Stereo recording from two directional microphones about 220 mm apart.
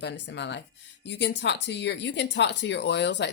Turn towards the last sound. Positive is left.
turn(degrees=55)  # may be behind; listen again after turning